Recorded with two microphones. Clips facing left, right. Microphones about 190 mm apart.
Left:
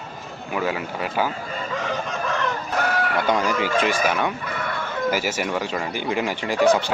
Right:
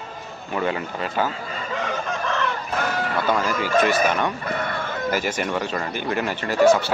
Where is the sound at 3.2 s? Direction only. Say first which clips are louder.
Even; 15° left (ahead or behind).